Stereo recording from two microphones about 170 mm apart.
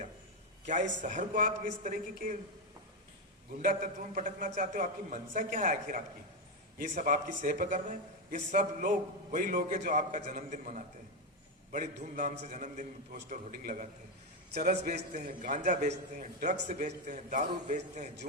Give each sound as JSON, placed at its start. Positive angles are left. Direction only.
{"t": 0.6, "sound": "speech", "side_deg": -45}
{"t": 3.6, "sound": "speech", "side_deg": -50}
{"t": 12.1, "sound": "speech", "side_deg": -45}
{"t": 15.1, "sound": "speech", "side_deg": -50}